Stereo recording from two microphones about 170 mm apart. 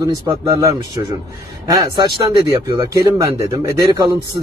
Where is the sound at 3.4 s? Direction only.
20° right (ahead or behind).